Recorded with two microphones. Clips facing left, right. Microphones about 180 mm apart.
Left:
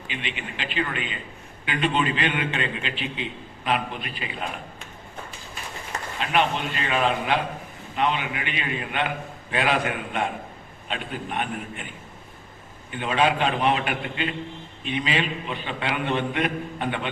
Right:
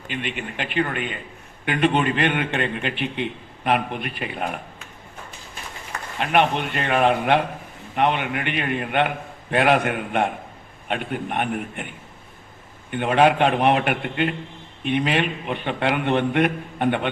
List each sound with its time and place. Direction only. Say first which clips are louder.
0.1 s a man's voice: right 5 dB; 50° right (ahead or behind)
6.1 s a man's voice: right 4 dB; 60° right (ahead or behind)